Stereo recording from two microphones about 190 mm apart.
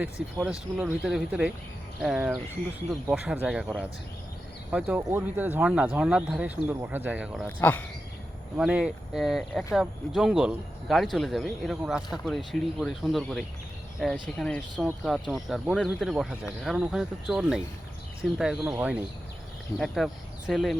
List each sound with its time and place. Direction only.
0.4 s speech: 5° right (ahead or behind)
4.7 s speech: 5° right (ahead or behind)
7.4 s speech: 10° left (ahead or behind)
8.5 s speech: 5° right (ahead or behind)